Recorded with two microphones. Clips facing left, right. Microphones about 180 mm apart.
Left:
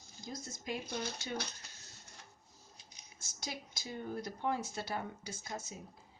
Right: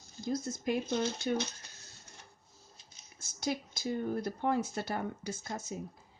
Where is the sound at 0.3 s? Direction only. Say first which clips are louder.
Right 9 dB; 60° right (ahead or behind).